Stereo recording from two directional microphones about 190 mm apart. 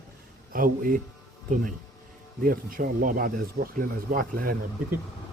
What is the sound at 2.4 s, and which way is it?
Speech, 50° right (ahead or behind).